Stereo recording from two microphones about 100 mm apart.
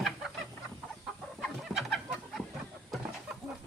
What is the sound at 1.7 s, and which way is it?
Chicken, centre (ahead or behind).